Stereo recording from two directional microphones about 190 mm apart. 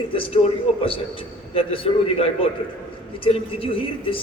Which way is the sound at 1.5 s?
30° left (ahead or behind).